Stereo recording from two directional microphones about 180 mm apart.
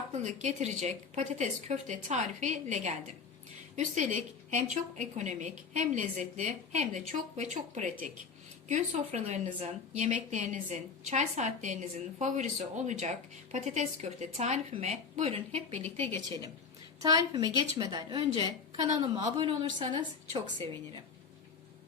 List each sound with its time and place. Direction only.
0.1 s a woman's voice: 40° right (ahead or behind)
17.0 s a woman's voice: 20° right (ahead or behind)
18.3 s a woman's voice: 35° right (ahead or behind)